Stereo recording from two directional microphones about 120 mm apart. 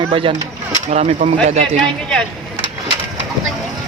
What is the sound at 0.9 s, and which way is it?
Speech, 70° right (ahead or behind).